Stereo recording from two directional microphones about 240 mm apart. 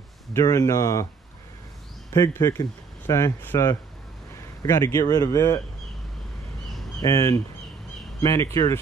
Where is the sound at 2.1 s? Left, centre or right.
Centre.